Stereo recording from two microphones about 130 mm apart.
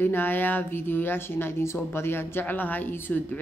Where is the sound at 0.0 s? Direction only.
15° left (ahead or behind).